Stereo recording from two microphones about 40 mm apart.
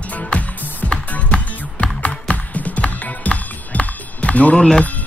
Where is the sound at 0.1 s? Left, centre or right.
Left.